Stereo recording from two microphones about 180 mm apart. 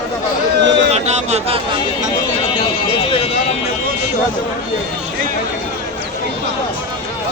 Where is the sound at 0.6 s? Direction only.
80° right.